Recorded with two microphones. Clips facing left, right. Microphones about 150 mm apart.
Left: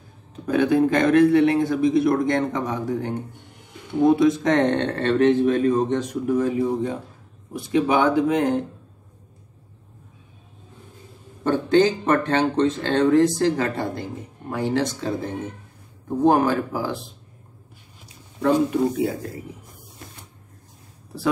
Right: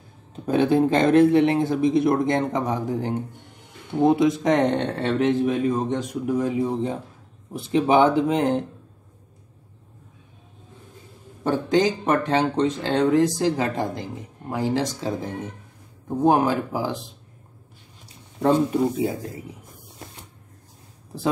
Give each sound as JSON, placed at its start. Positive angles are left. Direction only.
{"t": 0.5, "sound": "speech", "side_deg": -25}
{"t": 7.5, "sound": "speech", "side_deg": -25}
{"t": 11.4, "sound": "speech", "side_deg": -15}
{"t": 16.3, "sound": "speech", "side_deg": -15}
{"t": 18.4, "sound": "speech", "side_deg": -25}